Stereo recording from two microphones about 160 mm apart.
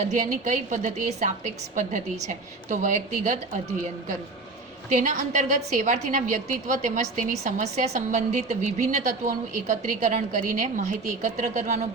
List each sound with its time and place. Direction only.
0.0 s a woman's voice: 50° right (ahead or behind)
4.9 s a woman's voice: 50° right (ahead or behind)